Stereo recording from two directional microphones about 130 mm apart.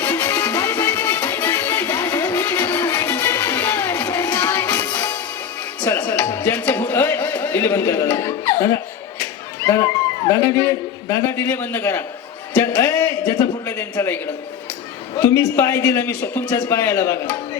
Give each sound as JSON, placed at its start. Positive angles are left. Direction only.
{"t": 0.0, "sound": "music", "side_deg": 15}
{"t": 9.6, "sound": "children playing", "side_deg": 20}
{"t": 10.2, "sound": "a man's voice", "side_deg": 25}
{"t": 15.2, "sound": "a man's voice", "side_deg": 20}